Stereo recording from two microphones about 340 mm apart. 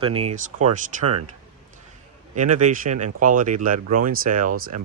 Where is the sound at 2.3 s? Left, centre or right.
Right.